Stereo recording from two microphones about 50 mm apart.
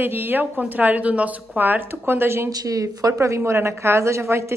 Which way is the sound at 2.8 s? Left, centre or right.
Right.